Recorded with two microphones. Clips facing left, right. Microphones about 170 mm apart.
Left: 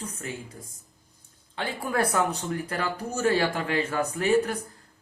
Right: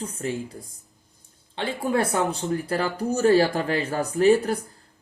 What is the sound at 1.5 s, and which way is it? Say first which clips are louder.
Speech: right 4 dB; 25° right (ahead or behind).